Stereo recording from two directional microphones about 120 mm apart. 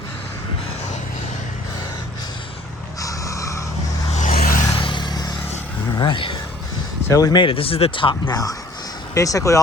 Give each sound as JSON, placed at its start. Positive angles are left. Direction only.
{"t": 3.0, "sound": "a sound", "side_deg": 25}
{"t": 4.1, "sound": "vehicle", "side_deg": 90}
{"t": 4.8, "sound": "vehicle", "side_deg": 40}
{"t": 6.0, "sound": "a sound", "side_deg": 45}
{"t": 7.1, "sound": "speech", "side_deg": 30}
{"t": 8.3, "sound": "speech", "side_deg": 30}